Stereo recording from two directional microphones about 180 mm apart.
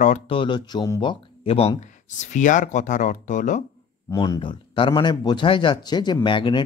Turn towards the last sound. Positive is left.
turn(degrees=25)  # may be behind; listen again after turning